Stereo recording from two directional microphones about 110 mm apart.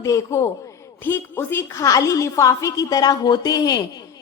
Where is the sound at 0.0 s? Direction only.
30° left (ahead or behind).